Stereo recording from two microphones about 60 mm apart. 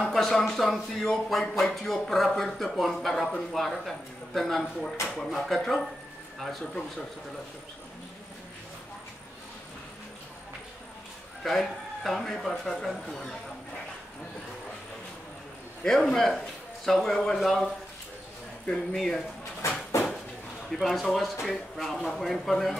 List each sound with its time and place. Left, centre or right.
0.1 s speech: centre
11.4 s speech: centre
15.8 s speech: centre
18.7 s speech: centre
19.6 s a sound: left
20.7 s speech: centre